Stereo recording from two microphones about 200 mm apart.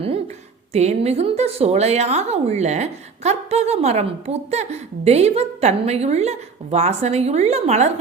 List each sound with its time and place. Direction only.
0.7 s a woman's voice: 35° right (ahead or behind)